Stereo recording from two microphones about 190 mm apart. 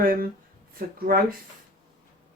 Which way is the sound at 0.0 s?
50° right (ahead or behind).